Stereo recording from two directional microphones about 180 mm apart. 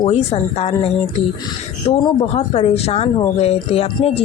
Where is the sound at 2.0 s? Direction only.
35° left (ahead or behind).